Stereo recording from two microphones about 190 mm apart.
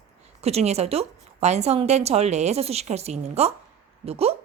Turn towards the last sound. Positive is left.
turn(degrees=-30)  # may be behind; listen again after turning